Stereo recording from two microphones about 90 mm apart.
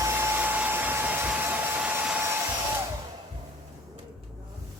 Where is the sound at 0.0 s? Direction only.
25° right (ahead or behind).